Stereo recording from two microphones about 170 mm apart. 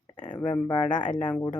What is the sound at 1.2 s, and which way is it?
Speech, 10° left (ahead or behind).